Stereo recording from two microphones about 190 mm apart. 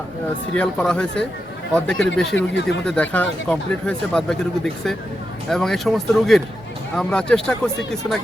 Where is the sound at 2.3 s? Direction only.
70° left (ahead or behind).